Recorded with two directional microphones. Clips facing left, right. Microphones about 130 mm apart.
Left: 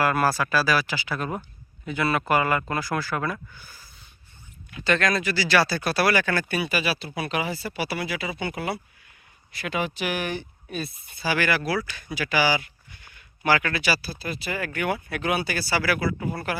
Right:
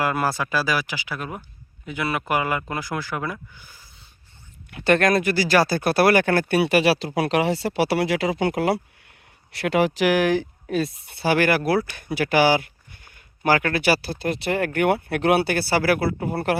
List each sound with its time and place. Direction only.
0.0 s speech: 20° right (ahead or behind)
4.7 s speech: 60° right (ahead or behind); by 8.8 s 90° right
9.5 s speech: 75° right (ahead or behind)